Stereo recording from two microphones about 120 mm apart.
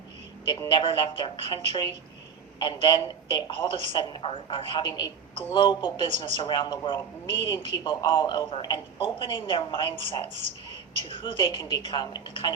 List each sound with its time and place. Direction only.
0.7 s speech: 45° left (ahead or behind)
2.8 s speech: 40° left (ahead or behind)